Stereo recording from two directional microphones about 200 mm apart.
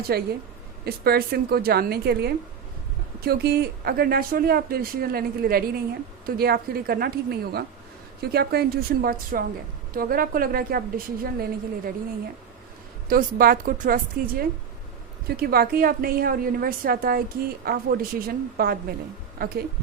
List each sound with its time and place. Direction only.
0.0 s a woman's voice: 50° right (ahead or behind)
13.1 s a woman's voice: 45° right (ahead or behind)